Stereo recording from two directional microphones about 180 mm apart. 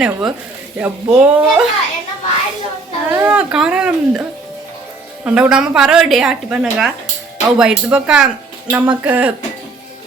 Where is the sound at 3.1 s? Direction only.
10° right (ahead or behind).